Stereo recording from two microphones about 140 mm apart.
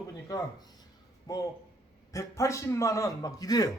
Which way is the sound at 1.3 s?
25° left (ahead or behind).